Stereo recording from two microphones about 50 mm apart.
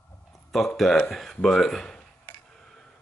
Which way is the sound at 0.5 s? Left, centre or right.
Centre.